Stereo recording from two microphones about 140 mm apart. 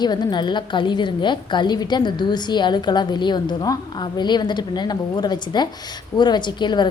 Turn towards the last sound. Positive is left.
turn(degrees=30)  # may be behind; listen again after turning